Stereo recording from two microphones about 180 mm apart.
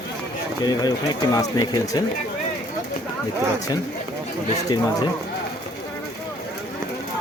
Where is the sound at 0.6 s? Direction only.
20° left (ahead or behind).